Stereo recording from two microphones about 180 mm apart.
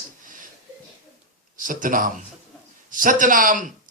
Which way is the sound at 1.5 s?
50° right (ahead or behind).